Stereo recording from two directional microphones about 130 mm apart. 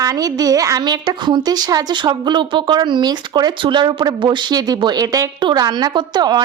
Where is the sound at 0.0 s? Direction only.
30° right (ahead or behind).